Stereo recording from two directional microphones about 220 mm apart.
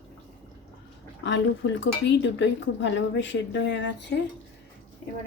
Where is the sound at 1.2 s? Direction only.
55° left (ahead or behind).